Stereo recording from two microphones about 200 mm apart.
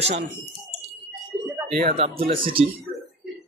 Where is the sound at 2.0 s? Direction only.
30° right (ahead or behind).